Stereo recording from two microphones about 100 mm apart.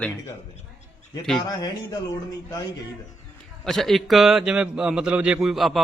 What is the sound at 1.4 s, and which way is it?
Speech, 40° left (ahead or behind).